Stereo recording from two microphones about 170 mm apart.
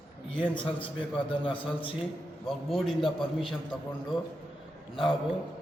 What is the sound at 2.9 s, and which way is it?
Speech, centre (ahead or behind).